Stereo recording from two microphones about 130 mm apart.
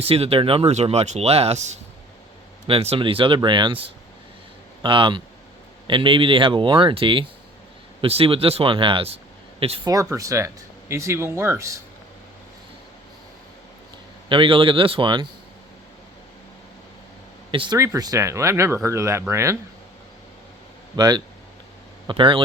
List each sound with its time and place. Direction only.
0.0 s speech: 50° right (ahead or behind)
2.6 s speech: 50° right (ahead or behind)
9.8 s speech: 25° right (ahead or behind)
14.3 s speech: 40° right (ahead or behind)
17.5 s speech: 40° right (ahead or behind)
17.7 s speech: 25° right (ahead or behind)
20.9 s speech: 30° right (ahead or behind)